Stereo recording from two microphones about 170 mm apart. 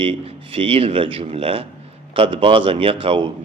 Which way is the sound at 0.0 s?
30° right (ahead or behind).